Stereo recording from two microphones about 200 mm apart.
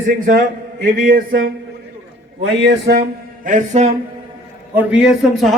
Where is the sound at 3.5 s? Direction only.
35° right (ahead or behind).